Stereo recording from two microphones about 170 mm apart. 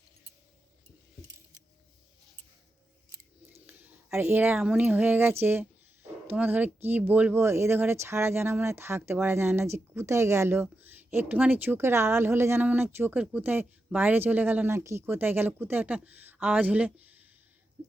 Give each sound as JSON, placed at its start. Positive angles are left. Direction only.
{"t": 3.7, "sound": "speech", "side_deg": -10}